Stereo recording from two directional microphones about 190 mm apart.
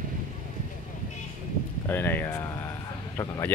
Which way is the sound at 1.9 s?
10° left (ahead or behind).